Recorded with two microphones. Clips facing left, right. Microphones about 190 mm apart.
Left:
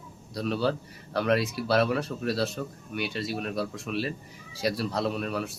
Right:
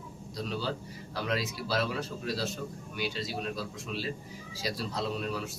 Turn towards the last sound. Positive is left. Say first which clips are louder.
# left 4 dB
turn(degrees=60)  # may be behind; listen again after turning